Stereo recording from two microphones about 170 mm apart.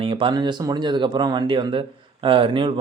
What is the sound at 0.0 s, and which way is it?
Speech, 30° right (ahead or behind).